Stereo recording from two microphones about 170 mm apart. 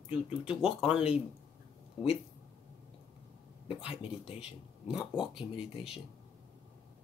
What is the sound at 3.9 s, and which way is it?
Speech, 35° left (ahead or behind).